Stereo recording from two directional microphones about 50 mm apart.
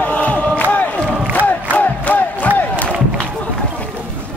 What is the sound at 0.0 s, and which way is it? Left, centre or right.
Crowd, left.